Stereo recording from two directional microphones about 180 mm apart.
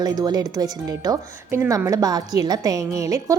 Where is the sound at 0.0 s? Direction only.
20° right (ahead or behind).